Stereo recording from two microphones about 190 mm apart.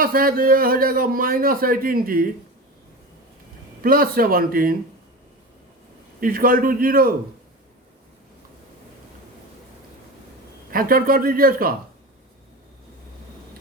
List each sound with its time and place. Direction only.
0.0 s a man's voice: 50° right (ahead or behind)
3.8 s a man's voice: 50° right (ahead or behind)
6.1 s a man's voice: 50° right (ahead or behind)
10.7 s a man's voice: 50° right (ahead or behind)